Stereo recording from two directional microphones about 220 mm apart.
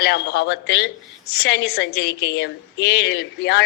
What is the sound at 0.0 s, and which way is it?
A woman's voice, 50° left (ahead or behind).